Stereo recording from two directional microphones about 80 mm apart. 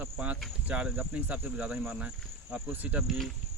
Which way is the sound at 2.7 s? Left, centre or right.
Right.